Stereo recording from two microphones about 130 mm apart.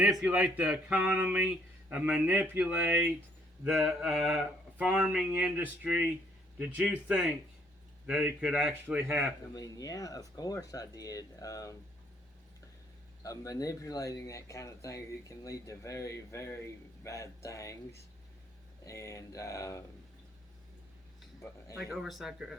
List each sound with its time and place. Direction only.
0.0 s speech: 10° right (ahead or behind)
3.6 s mantra: 5° right (ahead or behind)
4.8 s speech: 5° right (ahead or behind)
9.6 s speech: 30° left (ahead or behind)
13.2 s speech: 25° left (ahead or behind)
18.9 s speech: 25° left (ahead or behind)
21.9 s mantra: centre (ahead or behind)